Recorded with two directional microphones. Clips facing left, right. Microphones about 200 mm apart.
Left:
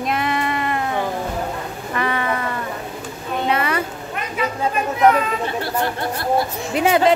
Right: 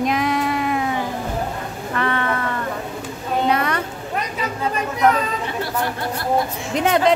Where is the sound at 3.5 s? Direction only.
5° left (ahead or behind).